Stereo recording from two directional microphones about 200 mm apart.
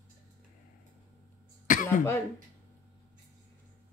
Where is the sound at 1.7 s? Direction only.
40° left (ahead or behind).